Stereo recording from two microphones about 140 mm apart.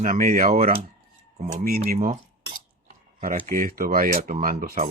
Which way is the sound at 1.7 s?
90° right.